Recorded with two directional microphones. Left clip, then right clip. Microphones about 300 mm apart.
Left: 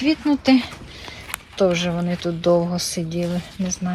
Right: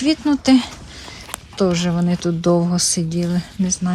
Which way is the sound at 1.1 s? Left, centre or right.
Centre.